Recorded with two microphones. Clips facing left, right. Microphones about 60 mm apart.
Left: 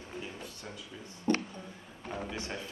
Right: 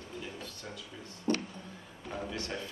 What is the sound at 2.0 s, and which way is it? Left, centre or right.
Speech, left.